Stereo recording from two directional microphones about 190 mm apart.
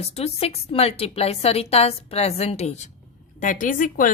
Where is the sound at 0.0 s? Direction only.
30° left (ahead or behind).